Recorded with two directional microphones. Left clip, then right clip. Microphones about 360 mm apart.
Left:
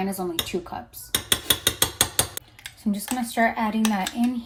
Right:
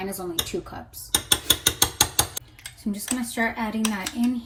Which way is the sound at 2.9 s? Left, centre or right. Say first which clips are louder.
Left 2 dB; left.